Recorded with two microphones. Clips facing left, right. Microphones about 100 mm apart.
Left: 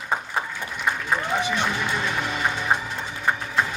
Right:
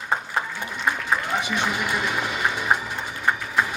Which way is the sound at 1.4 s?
15° right (ahead or behind).